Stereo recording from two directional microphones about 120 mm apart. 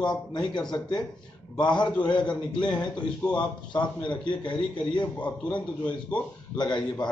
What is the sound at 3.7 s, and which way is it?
Speech, 40° left (ahead or behind).